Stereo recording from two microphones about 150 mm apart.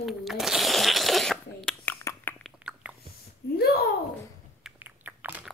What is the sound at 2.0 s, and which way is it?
Chewing, 15° left (ahead or behind).